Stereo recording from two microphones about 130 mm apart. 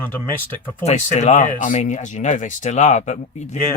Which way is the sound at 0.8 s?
60° left (ahead or behind).